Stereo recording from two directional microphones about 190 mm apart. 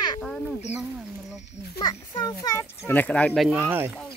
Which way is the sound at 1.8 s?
20° left (ahead or behind).